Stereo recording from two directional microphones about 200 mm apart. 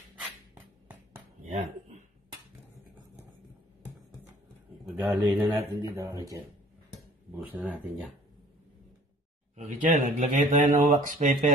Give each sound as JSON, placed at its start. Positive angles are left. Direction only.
{"t": 1.4, "sound": "a sound", "side_deg": -35}
{"t": 4.9, "sound": "speech", "side_deg": -15}
{"t": 6.9, "sound": "speech", "side_deg": -5}
{"t": 9.6, "sound": "speech", "side_deg": -40}